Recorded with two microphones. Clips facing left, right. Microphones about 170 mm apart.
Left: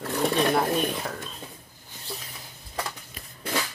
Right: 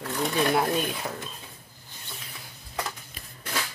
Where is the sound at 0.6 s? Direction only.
5° right (ahead or behind).